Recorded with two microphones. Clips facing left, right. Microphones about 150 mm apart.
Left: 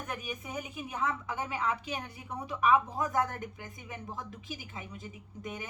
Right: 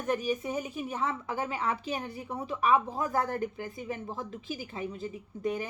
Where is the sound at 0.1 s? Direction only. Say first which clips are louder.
Right 12 dB; 35° right (ahead or behind).